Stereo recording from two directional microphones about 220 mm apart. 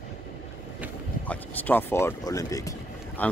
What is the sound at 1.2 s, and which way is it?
Speech, 5° left (ahead or behind).